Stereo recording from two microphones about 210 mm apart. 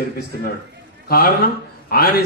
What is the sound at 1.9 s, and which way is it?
Speech, 45° left (ahead or behind).